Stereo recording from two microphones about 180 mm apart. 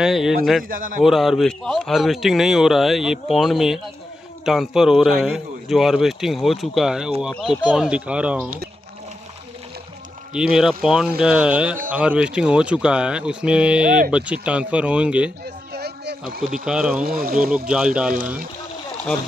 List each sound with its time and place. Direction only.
0.0 s a man's voice: centre (ahead or behind)
0.7 s a man's voice: 50° right (ahead or behind)
1.0 s a man's voice: centre (ahead or behind)
10.3 s a man's voice: 5° right (ahead or behind)
15.4 s a sound: 60° right (ahead or behind)
16.6 s a man's voice: 5° right (ahead or behind)
17.0 s speech: 55° right (ahead or behind)
17.6 s a man's voice: 5° right (ahead or behind)